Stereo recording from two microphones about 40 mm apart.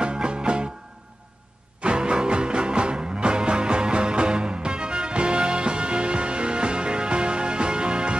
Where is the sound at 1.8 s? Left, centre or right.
Right.